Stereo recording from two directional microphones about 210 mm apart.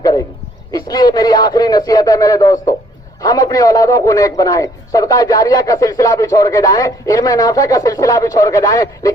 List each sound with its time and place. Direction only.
0.7 s a man's voice: 20° left (ahead or behind)